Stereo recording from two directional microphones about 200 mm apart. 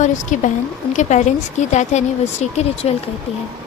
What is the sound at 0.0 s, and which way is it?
Speech, 35° left (ahead or behind).